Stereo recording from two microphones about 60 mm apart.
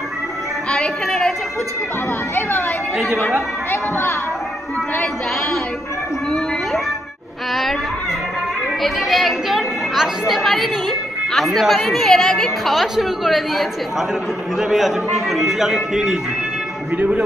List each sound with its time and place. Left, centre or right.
0.7 s music: centre
1.0 s a woman's voice: centre
3.7 s speech: left
8.8 s a woman's voice: centre
16.9 s speech: right